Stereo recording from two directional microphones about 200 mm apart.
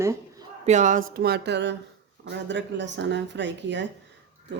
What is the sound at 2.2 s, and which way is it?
Speech, 60° right (ahead or behind).